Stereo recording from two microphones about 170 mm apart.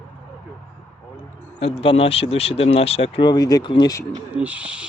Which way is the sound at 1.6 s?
35° left (ahead or behind).